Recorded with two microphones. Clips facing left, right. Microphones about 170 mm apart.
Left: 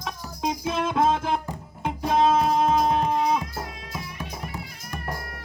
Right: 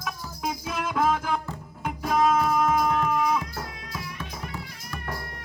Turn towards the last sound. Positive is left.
turn(degrees=20)  # may be behind; listen again after turning